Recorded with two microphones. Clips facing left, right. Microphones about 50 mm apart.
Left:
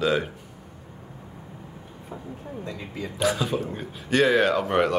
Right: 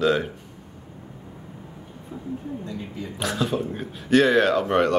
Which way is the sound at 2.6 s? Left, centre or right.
Left.